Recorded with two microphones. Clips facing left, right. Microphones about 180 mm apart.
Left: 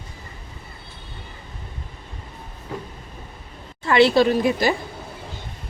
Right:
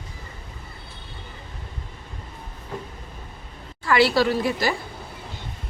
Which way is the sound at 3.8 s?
25° left (ahead or behind).